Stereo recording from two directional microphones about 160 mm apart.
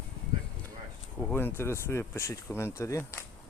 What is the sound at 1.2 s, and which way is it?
Speech, 10° left (ahead or behind).